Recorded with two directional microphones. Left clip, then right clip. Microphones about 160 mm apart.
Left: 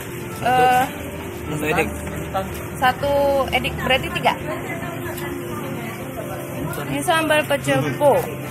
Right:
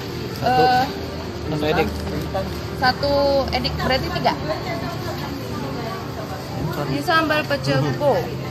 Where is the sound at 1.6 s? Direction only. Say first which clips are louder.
Even; 10° right (ahead or behind).